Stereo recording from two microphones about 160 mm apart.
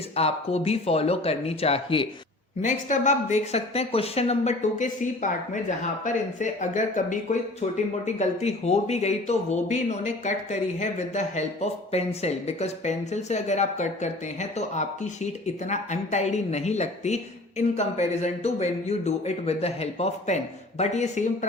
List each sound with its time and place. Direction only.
0.2 s speech: 40° left (ahead or behind)
2.6 s speech: 50° left (ahead or behind)